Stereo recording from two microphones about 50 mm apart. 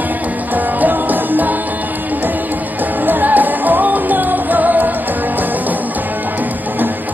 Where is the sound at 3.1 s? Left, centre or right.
Right.